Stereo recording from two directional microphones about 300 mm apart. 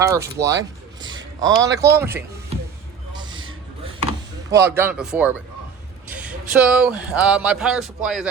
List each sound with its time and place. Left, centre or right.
0.0 s speech: centre
3.2 s a sound: centre
4.5 s speech: centre